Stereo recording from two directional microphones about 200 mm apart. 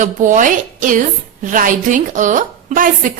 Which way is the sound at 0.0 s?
40° right (ahead or behind).